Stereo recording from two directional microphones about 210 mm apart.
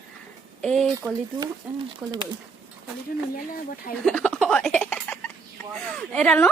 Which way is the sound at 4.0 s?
5° left (ahead or behind).